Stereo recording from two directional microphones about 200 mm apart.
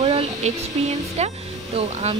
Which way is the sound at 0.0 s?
30° right (ahead or behind).